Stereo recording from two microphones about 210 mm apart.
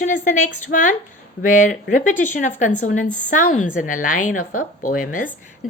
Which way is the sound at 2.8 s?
40° left (ahead or behind).